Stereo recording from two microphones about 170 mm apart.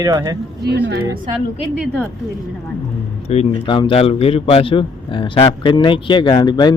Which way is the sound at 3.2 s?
35° left (ahead or behind).